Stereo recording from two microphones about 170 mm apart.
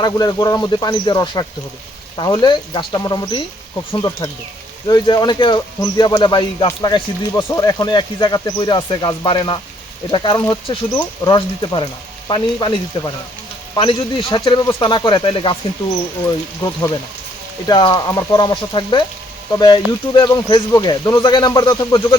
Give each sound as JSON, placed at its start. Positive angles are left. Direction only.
{"t": 0.0, "sound": "speech", "side_deg": 25}
{"t": 13.7, "sound": "speech", "side_deg": 30}